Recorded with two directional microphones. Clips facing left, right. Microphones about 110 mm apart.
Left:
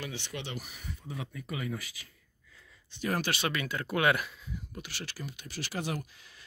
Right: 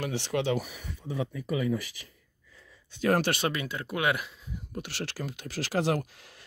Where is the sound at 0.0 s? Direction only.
75° right (ahead or behind).